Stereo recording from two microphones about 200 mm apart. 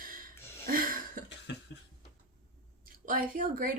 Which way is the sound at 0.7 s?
45° right (ahead or behind).